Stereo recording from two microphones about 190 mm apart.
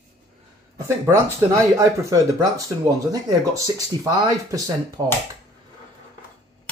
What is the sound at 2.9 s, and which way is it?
Speech, 20° right (ahead or behind).